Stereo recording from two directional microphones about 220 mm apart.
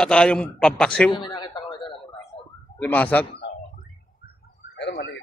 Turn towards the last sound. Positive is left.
turn(degrees=50)  # may be behind; listen again after turning